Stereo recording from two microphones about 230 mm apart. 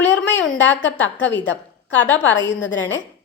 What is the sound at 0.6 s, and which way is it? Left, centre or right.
A woman's voice, left.